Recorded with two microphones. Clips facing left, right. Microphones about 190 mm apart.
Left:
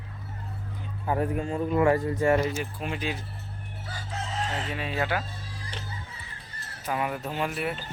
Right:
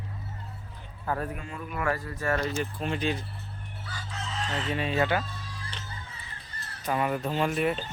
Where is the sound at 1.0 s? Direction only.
20° left (ahead or behind).